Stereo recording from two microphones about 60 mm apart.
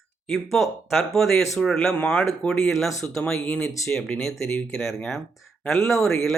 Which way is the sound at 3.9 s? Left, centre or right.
Left.